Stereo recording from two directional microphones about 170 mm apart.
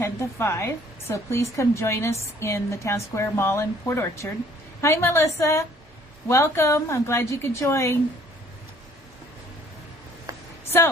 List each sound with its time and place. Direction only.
0.0 s a woman's voice: 15° left (ahead or behind)